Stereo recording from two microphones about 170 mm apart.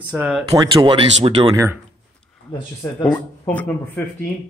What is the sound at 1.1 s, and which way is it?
Speech, 35° right (ahead or behind).